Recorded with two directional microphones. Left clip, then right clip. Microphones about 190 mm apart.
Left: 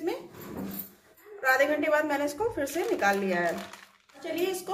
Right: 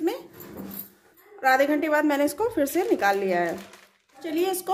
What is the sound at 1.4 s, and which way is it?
A woman's voice, 50° right (ahead or behind).